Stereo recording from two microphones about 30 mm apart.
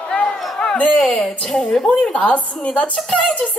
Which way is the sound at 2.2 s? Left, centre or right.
Left.